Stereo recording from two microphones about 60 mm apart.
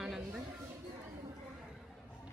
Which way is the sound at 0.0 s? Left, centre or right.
Centre.